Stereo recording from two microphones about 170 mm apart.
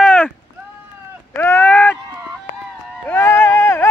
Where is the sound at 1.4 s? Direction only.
10° left (ahead or behind).